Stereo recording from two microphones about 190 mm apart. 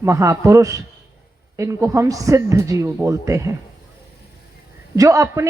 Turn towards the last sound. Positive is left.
turn(degrees=-15)  # may be behind; listen again after turning